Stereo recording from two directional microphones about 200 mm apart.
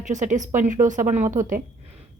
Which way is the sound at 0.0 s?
40° right (ahead or behind).